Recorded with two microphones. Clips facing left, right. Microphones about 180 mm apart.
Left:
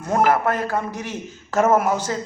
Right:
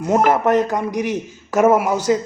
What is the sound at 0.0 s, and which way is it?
A man's voice, 20° right (ahead or behind).